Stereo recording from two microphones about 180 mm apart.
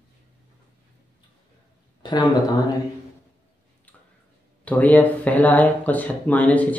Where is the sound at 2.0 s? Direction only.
25° left (ahead or behind).